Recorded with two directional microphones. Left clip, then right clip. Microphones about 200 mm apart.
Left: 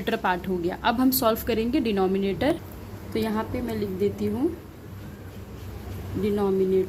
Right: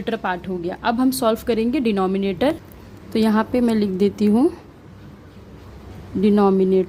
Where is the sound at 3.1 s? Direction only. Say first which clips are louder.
Right 8 dB; 40° right (ahead or behind).